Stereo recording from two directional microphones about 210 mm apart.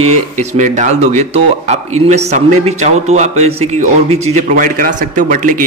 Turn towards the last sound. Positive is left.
turn(degrees=-40)  # may be behind; listen again after turning